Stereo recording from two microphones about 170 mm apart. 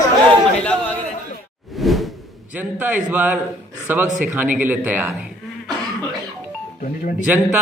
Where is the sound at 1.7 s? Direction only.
Centre (ahead or behind).